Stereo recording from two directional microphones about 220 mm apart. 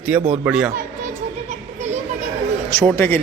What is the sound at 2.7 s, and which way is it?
Speech, 10° left (ahead or behind).